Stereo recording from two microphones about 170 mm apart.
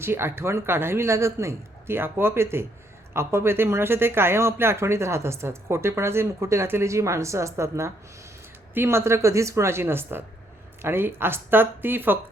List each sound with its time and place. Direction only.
0.0 s speech: 15° right (ahead or behind)